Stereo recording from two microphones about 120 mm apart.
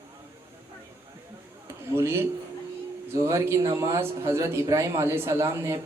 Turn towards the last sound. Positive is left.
turn(degrees=-25)  # may be behind; listen again after turning